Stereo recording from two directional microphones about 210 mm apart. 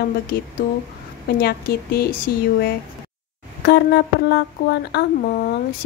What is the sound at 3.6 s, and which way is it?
A woman's voice, 50° left (ahead or behind).